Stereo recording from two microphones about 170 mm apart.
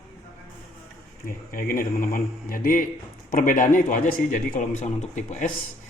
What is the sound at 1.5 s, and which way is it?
Speech, 55° left (ahead or behind).